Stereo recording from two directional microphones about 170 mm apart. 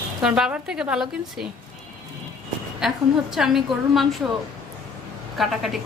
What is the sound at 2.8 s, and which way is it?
A woman's voice, 5° right (ahead or behind).